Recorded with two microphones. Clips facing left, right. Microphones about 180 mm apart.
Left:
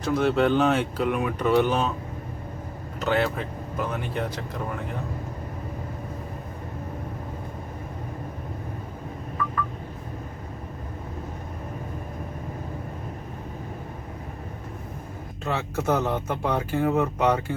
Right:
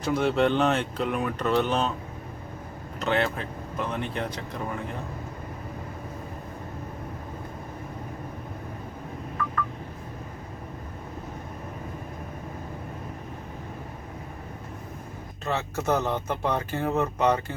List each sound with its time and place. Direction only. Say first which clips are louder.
0.0 s speech: left 1 dB; centre (ahead or behind)
3.0 s speech: left 2 dB; 5° left (ahead or behind)
15.4 s speech: left 1 dB; 10° left (ahead or behind)